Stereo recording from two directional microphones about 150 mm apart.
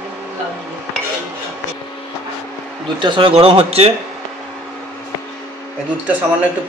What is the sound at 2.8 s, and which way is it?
A man's voice, 35° right (ahead or behind).